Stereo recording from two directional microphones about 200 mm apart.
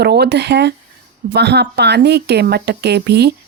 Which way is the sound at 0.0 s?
55° right (ahead or behind).